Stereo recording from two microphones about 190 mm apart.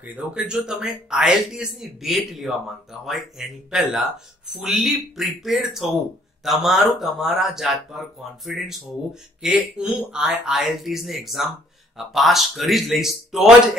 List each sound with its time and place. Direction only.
0.0 s a man's voice: 5° right (ahead or behind)